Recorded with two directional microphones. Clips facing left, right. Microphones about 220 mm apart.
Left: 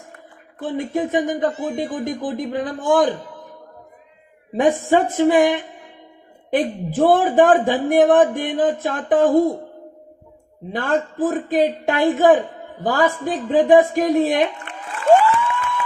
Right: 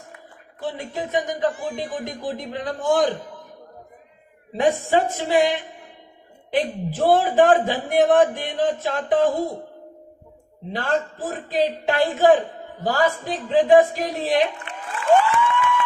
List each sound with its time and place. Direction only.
0.6 s a man's voice: 50° left (ahead or behind)
4.5 s a man's voice: 50° left (ahead or behind)
10.7 s a man's voice: 50° left (ahead or behind)
15.4 s a sound: 40° left (ahead or behind)